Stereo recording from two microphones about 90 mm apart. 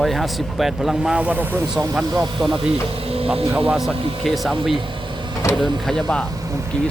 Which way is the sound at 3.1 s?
90° right.